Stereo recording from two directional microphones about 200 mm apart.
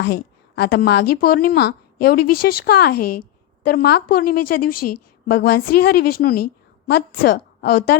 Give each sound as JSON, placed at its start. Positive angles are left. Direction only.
{"t": 0.0, "sound": "a woman's voice", "side_deg": 55}